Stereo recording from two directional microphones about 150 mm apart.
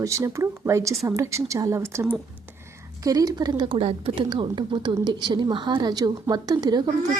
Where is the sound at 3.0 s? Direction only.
25° right (ahead or behind).